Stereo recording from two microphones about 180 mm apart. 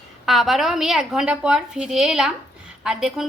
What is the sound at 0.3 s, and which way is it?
A woman's voice, centre (ahead or behind).